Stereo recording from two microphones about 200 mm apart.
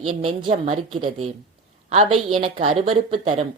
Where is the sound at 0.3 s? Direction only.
30° right (ahead or behind).